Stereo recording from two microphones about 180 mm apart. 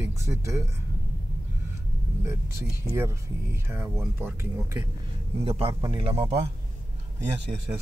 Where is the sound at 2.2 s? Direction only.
15° right (ahead or behind).